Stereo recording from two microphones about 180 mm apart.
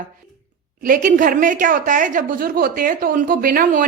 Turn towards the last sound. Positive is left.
turn(degrees=-55)  # may be behind; listen again after turning